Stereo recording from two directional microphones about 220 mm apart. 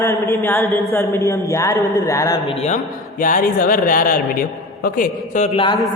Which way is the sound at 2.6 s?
35° left (ahead or behind).